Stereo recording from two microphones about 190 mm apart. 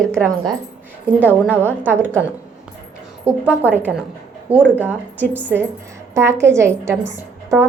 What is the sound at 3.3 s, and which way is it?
A woman's voice, 5° right (ahead or behind).